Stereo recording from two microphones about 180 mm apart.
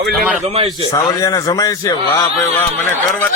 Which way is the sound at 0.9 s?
20° left (ahead or behind).